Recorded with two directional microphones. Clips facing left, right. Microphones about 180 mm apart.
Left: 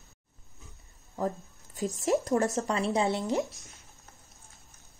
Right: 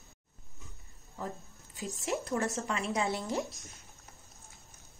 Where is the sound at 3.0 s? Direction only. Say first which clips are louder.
Left 5 dB; 20° left (ahead or behind).